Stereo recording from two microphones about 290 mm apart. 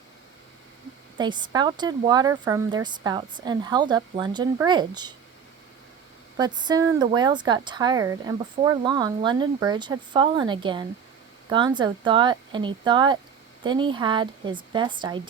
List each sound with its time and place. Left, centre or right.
1.2 s speech: centre
6.3 s speech: centre